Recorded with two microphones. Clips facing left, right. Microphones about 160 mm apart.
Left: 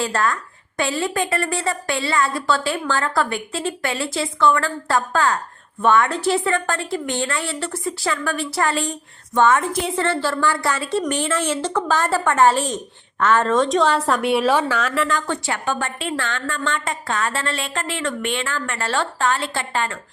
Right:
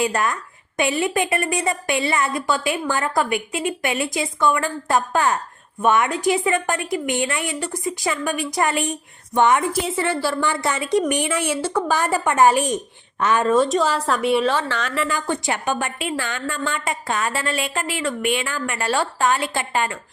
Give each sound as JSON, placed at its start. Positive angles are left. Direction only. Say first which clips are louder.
{"t": 0.0, "sound": "a woman's voice", "louder": "even", "side_deg": -20}
{"t": 9.7, "sound": "a woman's voice", "louder": "left 1 dB", "side_deg": -5}
{"t": 15.1, "sound": "a woman's voice", "louder": "even", "side_deg": -15}